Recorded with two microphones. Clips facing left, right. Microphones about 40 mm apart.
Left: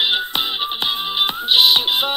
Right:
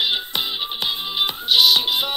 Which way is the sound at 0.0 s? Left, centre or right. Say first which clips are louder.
Left 3 dB; left.